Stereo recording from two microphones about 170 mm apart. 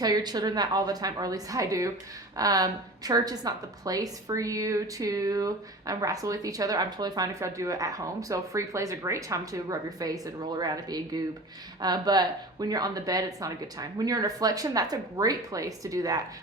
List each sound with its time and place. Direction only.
0.0 s a woman's voice: 25° right (ahead or behind)